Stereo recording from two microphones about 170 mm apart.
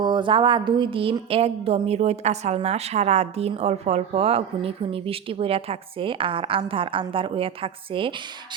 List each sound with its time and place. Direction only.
0.0 s a woman's voice: 25° right (ahead or behind)